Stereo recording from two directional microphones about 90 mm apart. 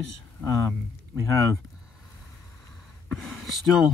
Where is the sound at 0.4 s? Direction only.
30° left (ahead or behind).